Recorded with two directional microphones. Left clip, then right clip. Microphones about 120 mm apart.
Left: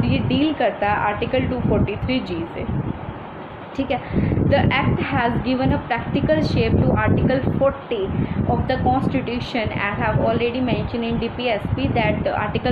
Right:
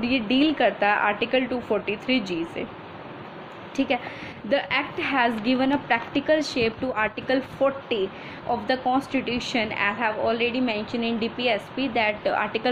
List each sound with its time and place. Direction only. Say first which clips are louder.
0.0 s a woman's voice: left 1 dB; 50° right (ahead or behind)
4.5 s a woman's voice: left 3 dB; 50° right (ahead or behind)